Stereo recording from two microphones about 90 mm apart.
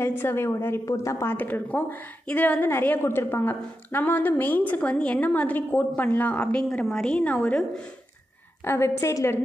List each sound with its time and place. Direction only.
0.2 s a woman's voice: 25° left (ahead or behind)
1.3 s a woman's voice: 20° left (ahead or behind)
8.6 s a woman's voice: 30° left (ahead or behind)